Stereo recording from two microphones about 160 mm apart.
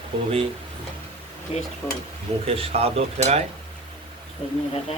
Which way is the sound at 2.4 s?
35° right (ahead or behind).